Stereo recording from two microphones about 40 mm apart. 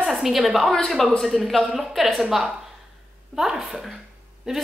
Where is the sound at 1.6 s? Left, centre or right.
Centre.